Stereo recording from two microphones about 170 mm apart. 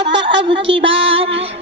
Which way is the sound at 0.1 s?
90° right.